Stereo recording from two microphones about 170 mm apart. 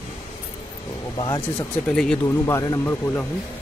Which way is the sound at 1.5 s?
5° left (ahead or behind).